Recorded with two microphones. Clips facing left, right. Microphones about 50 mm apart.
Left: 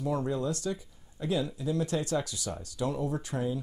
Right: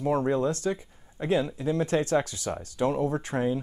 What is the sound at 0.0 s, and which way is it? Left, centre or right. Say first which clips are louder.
Speech: right 6 dB; right.